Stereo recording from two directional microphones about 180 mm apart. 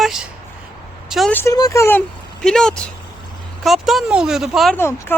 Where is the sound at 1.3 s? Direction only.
15° left (ahead or behind).